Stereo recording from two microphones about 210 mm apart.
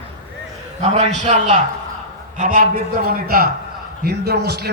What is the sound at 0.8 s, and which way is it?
A man's voice, 35° right (ahead or behind).